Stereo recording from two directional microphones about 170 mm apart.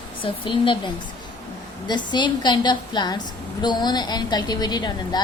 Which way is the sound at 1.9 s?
25° left (ahead or behind).